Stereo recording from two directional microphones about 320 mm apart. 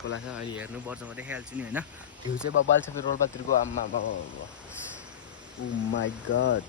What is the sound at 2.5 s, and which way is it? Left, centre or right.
Speech, left.